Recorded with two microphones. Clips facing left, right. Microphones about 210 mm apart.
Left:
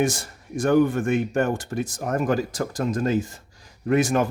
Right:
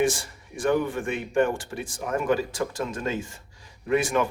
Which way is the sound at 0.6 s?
45° left (ahead or behind).